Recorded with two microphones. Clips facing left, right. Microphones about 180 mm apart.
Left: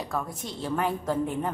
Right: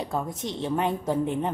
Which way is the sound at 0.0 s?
25° right (ahead or behind).